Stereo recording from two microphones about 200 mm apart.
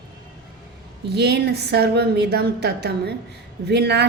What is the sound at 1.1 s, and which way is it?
Speech, 55° right (ahead or behind).